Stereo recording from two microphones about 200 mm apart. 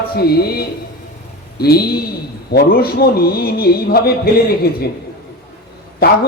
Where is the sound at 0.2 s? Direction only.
50° left (ahead or behind).